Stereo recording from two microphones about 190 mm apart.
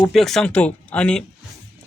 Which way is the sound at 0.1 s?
Centre (ahead or behind).